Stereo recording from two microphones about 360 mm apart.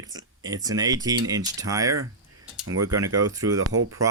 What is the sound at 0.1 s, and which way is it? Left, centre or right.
Speech, centre.